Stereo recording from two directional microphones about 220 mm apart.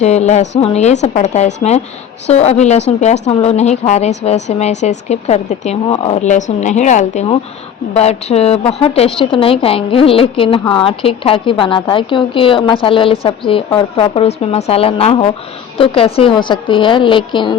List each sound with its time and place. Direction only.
0.0 s a woman's voice: 30° left (ahead or behind)